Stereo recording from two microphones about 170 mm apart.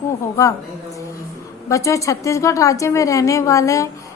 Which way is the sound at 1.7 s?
20° left (ahead or behind).